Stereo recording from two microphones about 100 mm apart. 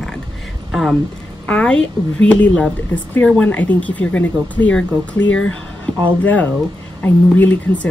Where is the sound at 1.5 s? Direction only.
10° left (ahead or behind).